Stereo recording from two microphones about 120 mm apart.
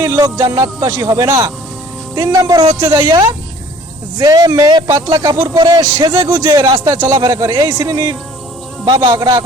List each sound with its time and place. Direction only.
0.0 s a man's voice: 25° right (ahead or behind)